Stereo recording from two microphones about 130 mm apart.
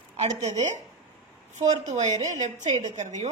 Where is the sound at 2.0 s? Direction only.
65° right (ahead or behind).